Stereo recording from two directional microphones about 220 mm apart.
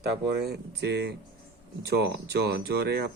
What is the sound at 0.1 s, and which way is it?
Speech, 50° right (ahead or behind).